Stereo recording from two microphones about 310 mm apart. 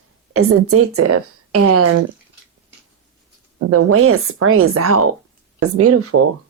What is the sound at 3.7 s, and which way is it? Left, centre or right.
A woman's voice, right.